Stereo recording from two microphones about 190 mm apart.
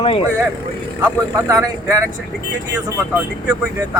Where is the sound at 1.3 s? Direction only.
15° right (ahead or behind).